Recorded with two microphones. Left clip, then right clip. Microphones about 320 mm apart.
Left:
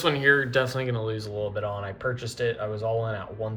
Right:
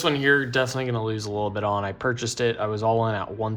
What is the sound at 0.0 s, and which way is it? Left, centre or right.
Speech, centre.